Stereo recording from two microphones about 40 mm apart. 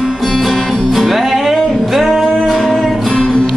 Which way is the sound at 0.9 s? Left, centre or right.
Centre.